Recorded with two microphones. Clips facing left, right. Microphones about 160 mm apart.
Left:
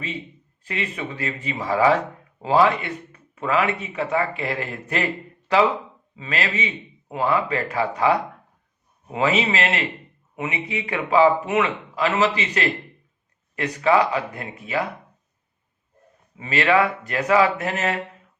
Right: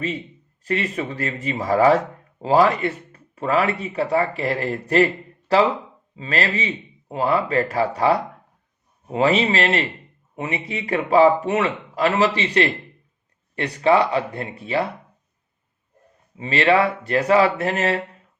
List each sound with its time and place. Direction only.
0.6 s speech: 40° right (ahead or behind)
16.4 s speech: 35° right (ahead or behind)